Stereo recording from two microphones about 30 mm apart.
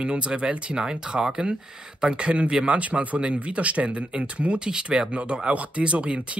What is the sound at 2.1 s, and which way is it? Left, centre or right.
Speech, right.